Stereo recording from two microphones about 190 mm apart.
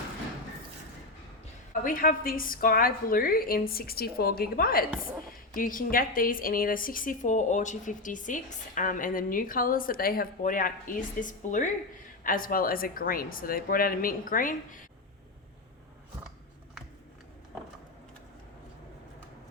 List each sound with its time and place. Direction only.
1.8 s a woman's voice: 45° left (ahead or behind)